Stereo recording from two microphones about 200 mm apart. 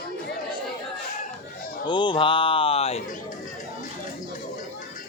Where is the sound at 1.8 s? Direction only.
25° left (ahead or behind).